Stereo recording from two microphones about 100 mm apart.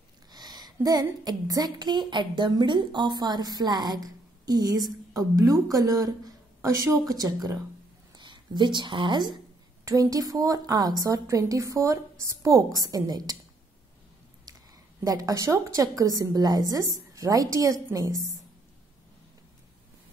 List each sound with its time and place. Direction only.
0.3 s speech: 45° right (ahead or behind)
8.1 s speech: 50° right (ahead or behind)
9.8 s speech: 35° right (ahead or behind)
15.0 s speech: 35° right (ahead or behind)